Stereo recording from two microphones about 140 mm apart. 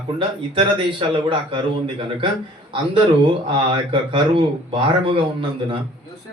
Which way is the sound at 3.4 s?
35° right (ahead or behind).